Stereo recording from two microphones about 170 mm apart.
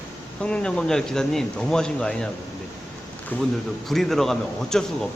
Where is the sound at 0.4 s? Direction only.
5° left (ahead or behind).